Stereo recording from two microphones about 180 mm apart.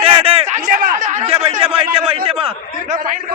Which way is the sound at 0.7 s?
55° right (ahead or behind).